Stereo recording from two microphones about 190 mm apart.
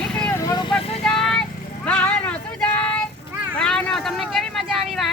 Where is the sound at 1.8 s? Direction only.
5° left (ahead or behind).